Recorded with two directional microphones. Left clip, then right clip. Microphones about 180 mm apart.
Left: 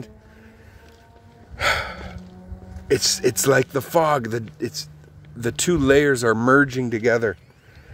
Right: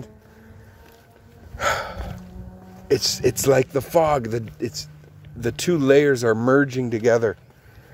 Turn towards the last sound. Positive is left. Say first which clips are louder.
# right 1 dB
turn(degrees=5)  # may be behind; listen again after turning